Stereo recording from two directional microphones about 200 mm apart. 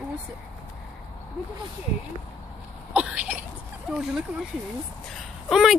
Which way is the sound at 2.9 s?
5° right (ahead or behind).